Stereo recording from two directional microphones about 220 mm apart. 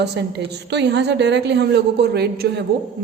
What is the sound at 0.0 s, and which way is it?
A woman's voice, 50° right (ahead or behind).